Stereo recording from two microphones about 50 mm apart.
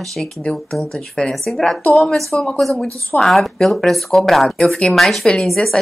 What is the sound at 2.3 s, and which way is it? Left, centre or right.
Speech, left.